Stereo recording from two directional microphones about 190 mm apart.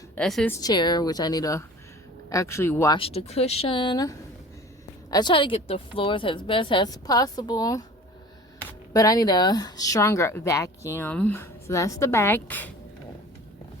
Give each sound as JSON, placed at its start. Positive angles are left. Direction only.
{"t": 0.2, "sound": "speech", "side_deg": 5}
{"t": 0.6, "sound": "a woman's voice", "side_deg": 20}
{"t": 3.0, "sound": "a woman's voice", "side_deg": 30}
{"t": 8.9, "sound": "speech", "side_deg": 20}